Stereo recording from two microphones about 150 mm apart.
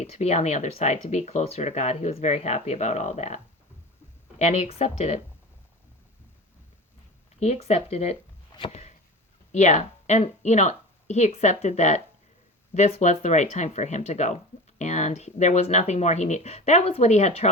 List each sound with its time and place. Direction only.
0.0 s speech: 45° left (ahead or behind)
7.3 s speech: 45° left (ahead or behind)
8.5 s a sound: 35° left (ahead or behind)
9.5 s speech: 50° left (ahead or behind)